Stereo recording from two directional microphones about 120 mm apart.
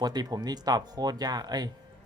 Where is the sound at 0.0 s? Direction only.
35° right (ahead or behind).